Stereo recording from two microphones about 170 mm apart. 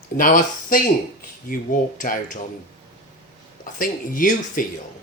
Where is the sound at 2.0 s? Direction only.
50° left (ahead or behind).